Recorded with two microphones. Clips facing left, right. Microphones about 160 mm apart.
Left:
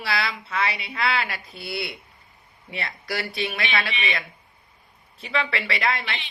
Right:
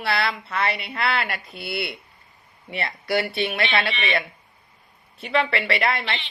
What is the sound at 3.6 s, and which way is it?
Speech, 60° right (ahead or behind).